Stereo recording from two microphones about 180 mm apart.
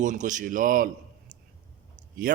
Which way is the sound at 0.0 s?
45° right (ahead or behind).